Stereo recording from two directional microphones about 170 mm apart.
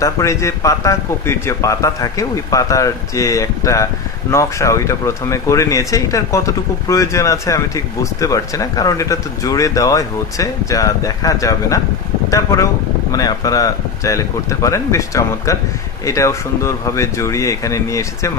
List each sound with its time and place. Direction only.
0.0 s speech: 15° left (ahead or behind)